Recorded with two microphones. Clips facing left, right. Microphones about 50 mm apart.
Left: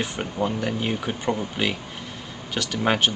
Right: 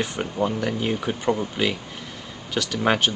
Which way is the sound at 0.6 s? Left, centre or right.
Centre.